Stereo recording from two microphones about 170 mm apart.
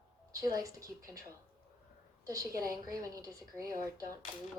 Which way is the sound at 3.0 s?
20° right (ahead or behind).